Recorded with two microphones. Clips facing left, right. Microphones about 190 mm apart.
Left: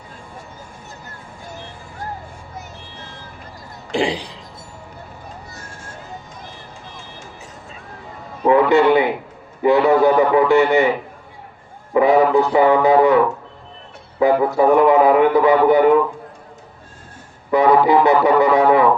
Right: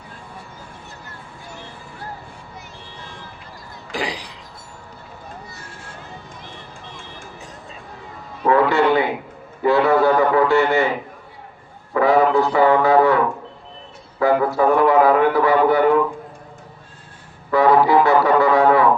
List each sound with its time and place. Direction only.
3.9 s a sound: 25° left (ahead or behind)
8.4 s a sound: 20° left (ahead or behind)
9.6 s a man's voice: 20° left (ahead or behind)
11.9 s a man's voice: 20° left (ahead or behind)
14.2 s a man's voice: 20° left (ahead or behind)
17.5 s music: 20° left (ahead or behind)